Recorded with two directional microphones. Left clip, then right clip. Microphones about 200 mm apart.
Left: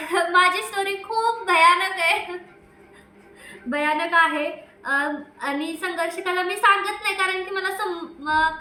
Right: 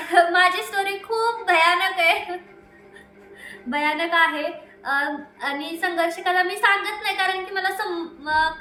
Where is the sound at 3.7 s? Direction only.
Centre (ahead or behind).